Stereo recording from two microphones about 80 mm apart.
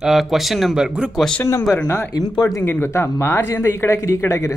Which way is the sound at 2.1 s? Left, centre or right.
Left.